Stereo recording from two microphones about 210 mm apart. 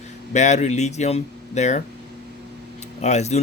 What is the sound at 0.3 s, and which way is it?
Speech, 35° left (ahead or behind).